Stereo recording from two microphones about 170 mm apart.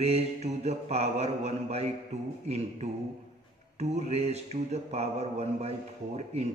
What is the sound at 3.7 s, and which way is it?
Speech, 40° right (ahead or behind).